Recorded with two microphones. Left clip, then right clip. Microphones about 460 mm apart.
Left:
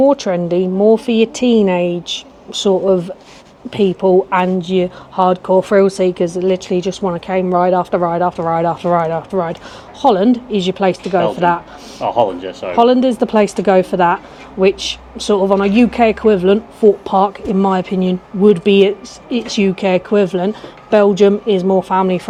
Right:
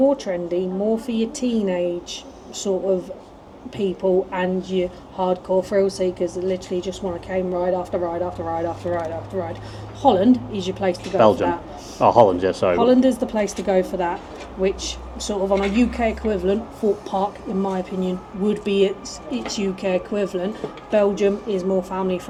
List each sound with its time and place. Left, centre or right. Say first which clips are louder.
0.1 s speech: left 7 dB; left
11.9 s speech: right 1 dB; right
12.7 s speech: left 9 dB; left